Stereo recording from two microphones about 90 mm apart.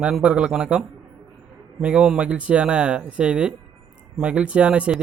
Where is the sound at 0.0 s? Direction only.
10° right (ahead or behind).